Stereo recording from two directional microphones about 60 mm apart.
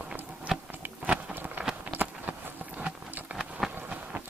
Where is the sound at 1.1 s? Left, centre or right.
Right.